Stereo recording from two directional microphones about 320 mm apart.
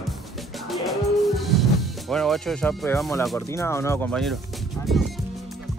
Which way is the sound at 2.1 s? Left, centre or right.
Centre.